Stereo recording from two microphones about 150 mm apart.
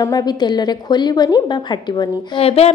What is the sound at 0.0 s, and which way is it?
A woman's voice, 25° left (ahead or behind).